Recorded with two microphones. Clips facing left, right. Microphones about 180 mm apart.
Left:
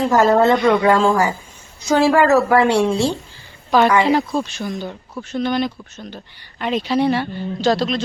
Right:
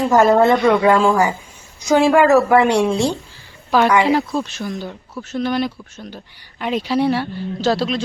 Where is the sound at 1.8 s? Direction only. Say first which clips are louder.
Right 1 dB; 15° right (ahead or behind).